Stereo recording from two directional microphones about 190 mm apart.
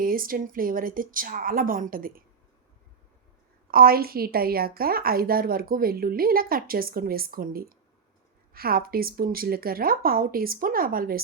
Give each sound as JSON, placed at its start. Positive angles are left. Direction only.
{"t": 0.0, "sound": "a woman's voice", "side_deg": -50}
{"t": 3.7, "sound": "a woman's voice", "side_deg": -50}